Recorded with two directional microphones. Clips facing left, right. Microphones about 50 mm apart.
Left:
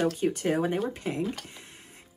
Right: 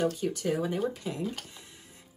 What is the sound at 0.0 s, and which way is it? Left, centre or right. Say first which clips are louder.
Speech: left 3 dB; left.